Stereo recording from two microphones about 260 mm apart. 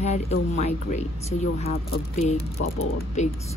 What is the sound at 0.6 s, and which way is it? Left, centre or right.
Speech, left.